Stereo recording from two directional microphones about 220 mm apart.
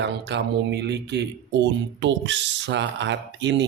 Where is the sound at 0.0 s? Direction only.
50° right (ahead or behind).